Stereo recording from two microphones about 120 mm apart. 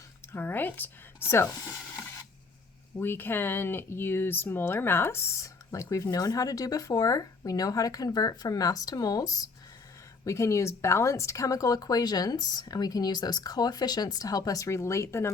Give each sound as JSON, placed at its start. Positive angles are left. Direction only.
{"t": 0.3, "sound": "speech", "side_deg": 15}